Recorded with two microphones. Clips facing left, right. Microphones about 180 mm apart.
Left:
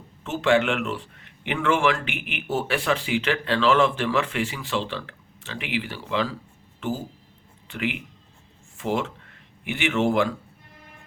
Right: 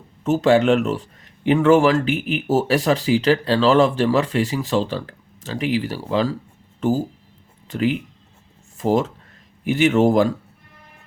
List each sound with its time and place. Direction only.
0.3 s a man's voice: 40° right (ahead or behind)